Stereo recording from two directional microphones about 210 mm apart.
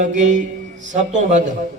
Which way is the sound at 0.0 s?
35° right (ahead or behind).